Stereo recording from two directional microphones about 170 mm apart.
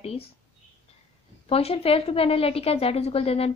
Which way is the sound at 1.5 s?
35° left (ahead or behind).